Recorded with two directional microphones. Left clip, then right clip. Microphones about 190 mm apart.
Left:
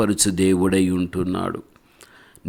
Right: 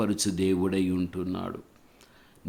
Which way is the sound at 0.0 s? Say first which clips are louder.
Left 8 dB; 40° left (ahead or behind).